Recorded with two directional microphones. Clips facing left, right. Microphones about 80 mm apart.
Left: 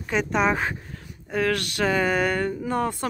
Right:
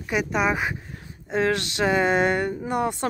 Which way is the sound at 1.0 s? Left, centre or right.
Right.